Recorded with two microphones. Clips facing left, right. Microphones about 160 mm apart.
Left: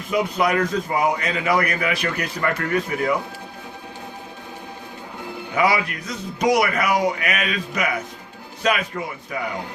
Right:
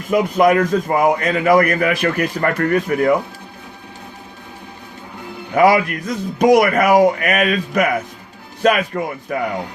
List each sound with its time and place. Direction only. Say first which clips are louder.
0.1 s a man's voice: right 7 dB; 50° right (ahead or behind)
5.5 s a man's voice: right 7 dB; 45° right (ahead or behind)